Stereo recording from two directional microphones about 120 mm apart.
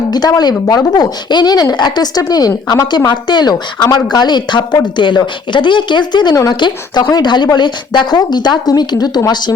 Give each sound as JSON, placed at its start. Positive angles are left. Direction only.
{"t": 0.1, "sound": "a woman's voice", "side_deg": 35}